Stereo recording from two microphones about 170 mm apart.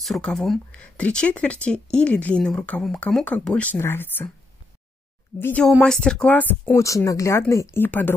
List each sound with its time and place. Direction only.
0.0 s speech: centre (ahead or behind)
5.4 s speech: 5° left (ahead or behind)